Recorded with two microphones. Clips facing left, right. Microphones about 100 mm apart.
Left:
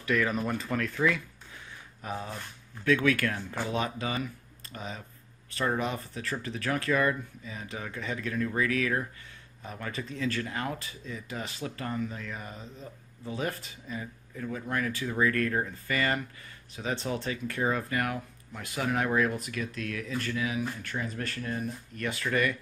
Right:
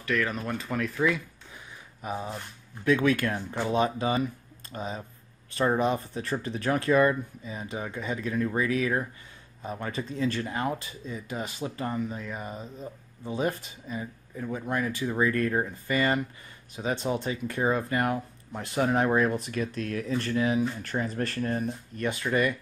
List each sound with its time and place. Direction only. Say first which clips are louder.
0.0 s speech: left 1 dB; 5° left (ahead or behind); by 21.6 s 40° right (ahead or behind)
21.6 s speech: right 4 dB; 25° right (ahead or behind)